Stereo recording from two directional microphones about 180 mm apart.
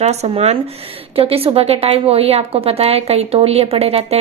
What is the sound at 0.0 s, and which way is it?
Speech, 35° right (ahead or behind).